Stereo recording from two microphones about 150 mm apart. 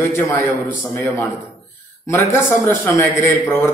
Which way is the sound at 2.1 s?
20° left (ahead or behind).